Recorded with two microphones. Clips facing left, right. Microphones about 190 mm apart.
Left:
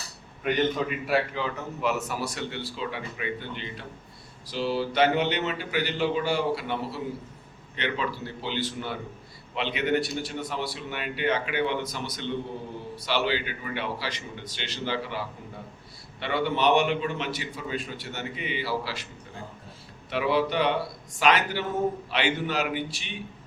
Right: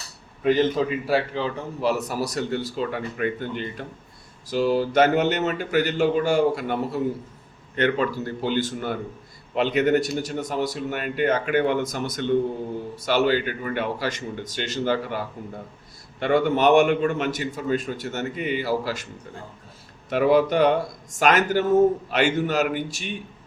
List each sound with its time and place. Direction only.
0.4 s a man's voice: 30° right (ahead or behind); by 15.2 s 45° right (ahead or behind)
16.2 s a man's voice: 45° right (ahead or behind)
20.1 s a man's voice: 45° right (ahead or behind)